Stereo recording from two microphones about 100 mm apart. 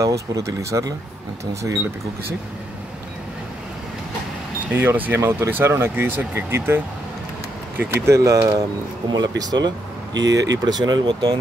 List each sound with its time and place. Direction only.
0.0 s speech: 30° right (ahead or behind)
4.7 s speech: 20° right (ahead or behind)
9.1 s speech: 40° right (ahead or behind)